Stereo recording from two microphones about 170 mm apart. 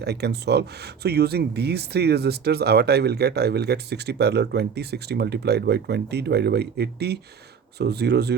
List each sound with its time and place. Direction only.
0.0 s speech: 80° right